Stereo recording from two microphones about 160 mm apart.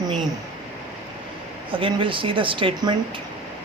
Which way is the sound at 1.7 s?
30° right (ahead or behind).